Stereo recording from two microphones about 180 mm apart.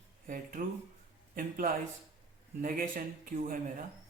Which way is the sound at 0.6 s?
50° right (ahead or behind).